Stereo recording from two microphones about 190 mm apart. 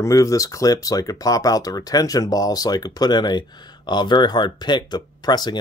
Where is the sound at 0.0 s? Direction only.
15° left (ahead or behind).